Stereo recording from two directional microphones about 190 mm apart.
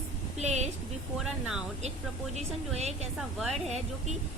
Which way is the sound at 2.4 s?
35° right (ahead or behind).